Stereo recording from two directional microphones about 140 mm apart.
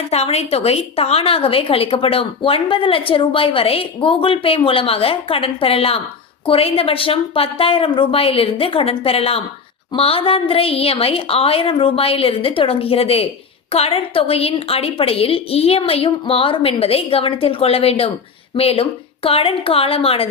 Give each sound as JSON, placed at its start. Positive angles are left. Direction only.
{"t": 0.1, "sound": "a woman's voice", "side_deg": 50}